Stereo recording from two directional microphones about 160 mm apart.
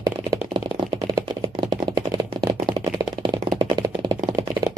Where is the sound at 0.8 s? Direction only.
25° right (ahead or behind).